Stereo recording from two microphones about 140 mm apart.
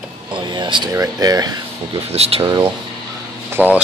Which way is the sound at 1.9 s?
45° right (ahead or behind).